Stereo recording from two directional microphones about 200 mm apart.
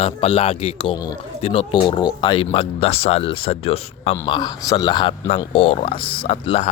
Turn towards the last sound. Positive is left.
turn(degrees=30)  # may be behind; listen again after turning